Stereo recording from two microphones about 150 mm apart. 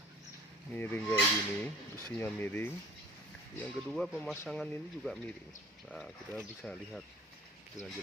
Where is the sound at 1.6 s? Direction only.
10° left (ahead or behind).